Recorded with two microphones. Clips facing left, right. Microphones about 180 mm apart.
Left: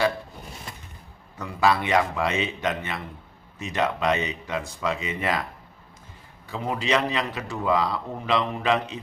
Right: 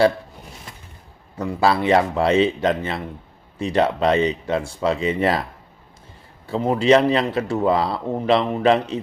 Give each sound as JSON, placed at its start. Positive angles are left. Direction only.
{"t": 1.4, "sound": "speech", "side_deg": -30}
{"t": 6.5, "sound": "speech", "side_deg": -30}